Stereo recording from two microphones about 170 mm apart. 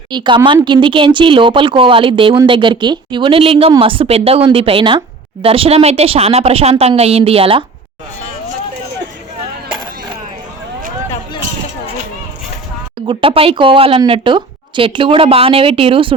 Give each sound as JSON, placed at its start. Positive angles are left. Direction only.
{"t": 0.1, "sound": "a woman's voice", "side_deg": -25}
{"t": 13.1, "sound": "a woman's voice", "side_deg": -30}